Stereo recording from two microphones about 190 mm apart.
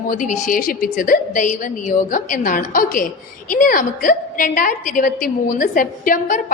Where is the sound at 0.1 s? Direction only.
40° left (ahead or behind).